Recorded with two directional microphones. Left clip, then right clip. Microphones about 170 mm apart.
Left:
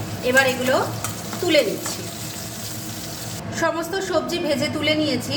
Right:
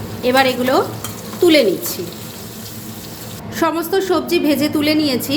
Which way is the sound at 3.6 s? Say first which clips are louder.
Right 6 dB; 45° right (ahead or behind).